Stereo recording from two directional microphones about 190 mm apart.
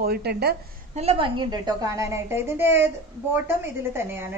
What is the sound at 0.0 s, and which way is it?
Speech, 55° right (ahead or behind).